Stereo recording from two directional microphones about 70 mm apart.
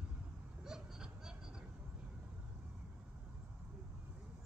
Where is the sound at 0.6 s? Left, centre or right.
Centre.